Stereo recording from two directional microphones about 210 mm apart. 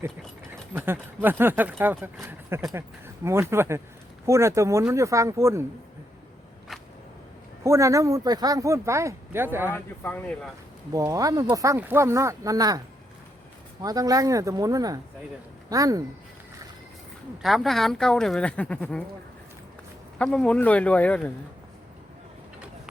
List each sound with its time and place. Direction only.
0.7 s speech: 10° right (ahead or behind)
6.7 s a sound: centre (ahead or behind)
7.6 s speech: 15° right (ahead or behind)
9.7 s speech: 10° left (ahead or behind)
10.9 s speech: 15° right (ahead or behind)
13.8 s speech: 15° right (ahead or behind)
17.4 s speech: centre (ahead or behind)
20.1 s speech: 5° left (ahead or behind)